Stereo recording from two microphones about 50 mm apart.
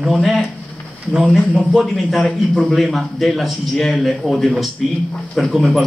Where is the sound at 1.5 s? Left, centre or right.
Centre.